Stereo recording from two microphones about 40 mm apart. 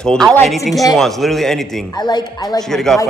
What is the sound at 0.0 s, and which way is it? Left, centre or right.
Speech, centre.